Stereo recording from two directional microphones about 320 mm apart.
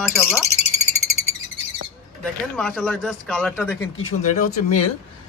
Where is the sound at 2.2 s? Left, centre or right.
Centre.